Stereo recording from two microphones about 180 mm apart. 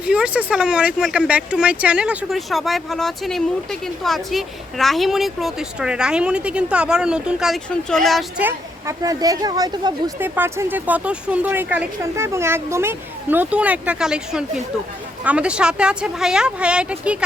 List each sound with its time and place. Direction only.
0.0 s speech: 5° right (ahead or behind)
8.4 s speech: 15° right (ahead or behind)